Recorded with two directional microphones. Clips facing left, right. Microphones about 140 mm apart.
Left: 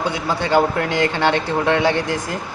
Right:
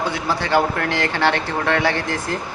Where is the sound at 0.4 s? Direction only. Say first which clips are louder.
Left 3 dB; 20° left (ahead or behind).